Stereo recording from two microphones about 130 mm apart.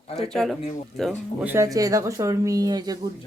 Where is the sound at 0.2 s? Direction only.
5° left (ahead or behind).